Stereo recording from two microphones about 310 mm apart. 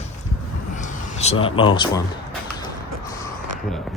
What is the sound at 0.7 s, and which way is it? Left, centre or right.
Speech, left.